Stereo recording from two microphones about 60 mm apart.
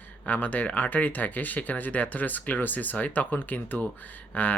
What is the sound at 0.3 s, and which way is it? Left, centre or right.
Speech, left.